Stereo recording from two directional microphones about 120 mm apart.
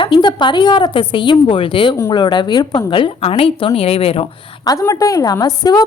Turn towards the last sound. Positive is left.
turn(degrees=35)  # may be behind; listen again after turning